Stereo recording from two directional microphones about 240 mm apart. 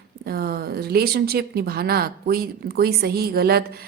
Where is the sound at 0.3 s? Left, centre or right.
Right.